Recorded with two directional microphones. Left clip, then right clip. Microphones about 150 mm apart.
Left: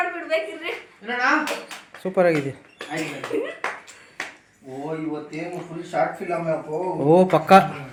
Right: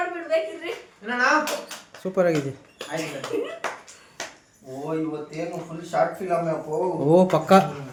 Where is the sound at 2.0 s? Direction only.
10° right (ahead or behind).